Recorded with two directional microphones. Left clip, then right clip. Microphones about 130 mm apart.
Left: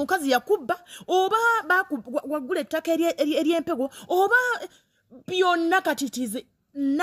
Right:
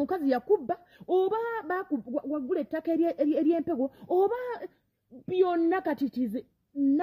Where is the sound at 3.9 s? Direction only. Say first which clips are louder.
Left 8 dB; 5° left (ahead or behind).